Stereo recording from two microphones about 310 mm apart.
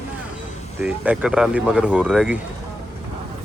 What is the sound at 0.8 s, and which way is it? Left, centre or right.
Speech, centre.